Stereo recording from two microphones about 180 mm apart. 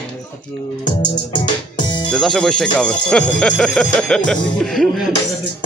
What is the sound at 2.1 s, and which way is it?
Speech, centre (ahead or behind).